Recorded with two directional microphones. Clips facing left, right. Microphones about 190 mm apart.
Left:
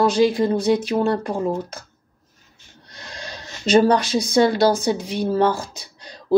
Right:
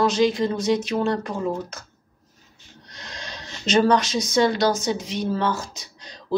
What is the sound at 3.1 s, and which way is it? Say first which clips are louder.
Speech: left 2 dB; 30° left (ahead or behind).